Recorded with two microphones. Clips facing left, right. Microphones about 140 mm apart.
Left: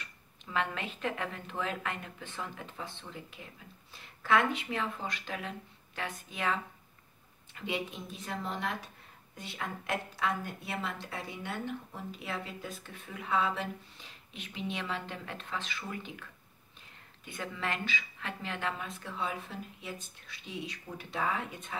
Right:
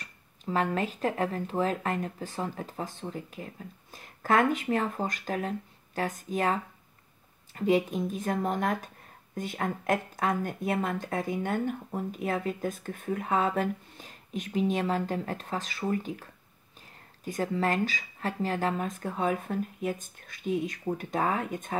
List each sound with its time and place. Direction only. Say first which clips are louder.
0.0 s speech: right 10 dB; 40° right (ahead or behind)